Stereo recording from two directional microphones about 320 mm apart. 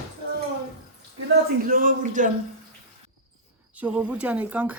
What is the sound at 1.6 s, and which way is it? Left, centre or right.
Speech, right.